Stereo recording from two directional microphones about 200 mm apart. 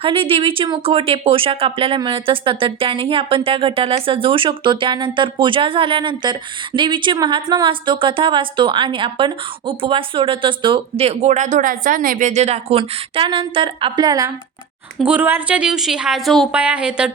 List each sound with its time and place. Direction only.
0.0 s a woman's voice: 25° right (ahead or behind)
14.9 s a woman's voice: 5° right (ahead or behind)